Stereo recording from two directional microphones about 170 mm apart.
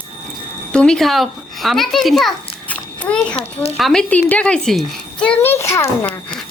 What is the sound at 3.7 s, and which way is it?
A child's voice, centre (ahead or behind).